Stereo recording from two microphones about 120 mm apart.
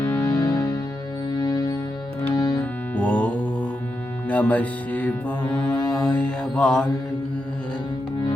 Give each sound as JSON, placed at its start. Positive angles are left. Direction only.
{"t": 0.0, "sound": "music", "side_deg": 15}
{"t": 0.3, "sound": "music", "side_deg": 30}
{"t": 2.9, "sound": "mantra", "side_deg": 10}
{"t": 4.3, "sound": "music", "side_deg": 10}
{"t": 5.4, "sound": "music", "side_deg": 35}
{"t": 6.1, "sound": "mantra", "side_deg": 10}